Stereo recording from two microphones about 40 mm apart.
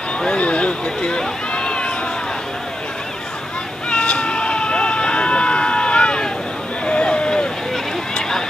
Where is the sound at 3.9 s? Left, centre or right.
Left.